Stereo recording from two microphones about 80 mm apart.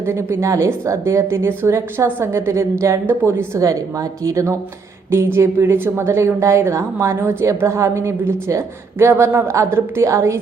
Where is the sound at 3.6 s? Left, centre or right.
Right.